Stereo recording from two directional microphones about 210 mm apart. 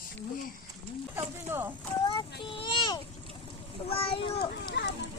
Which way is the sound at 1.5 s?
10° right (ahead or behind).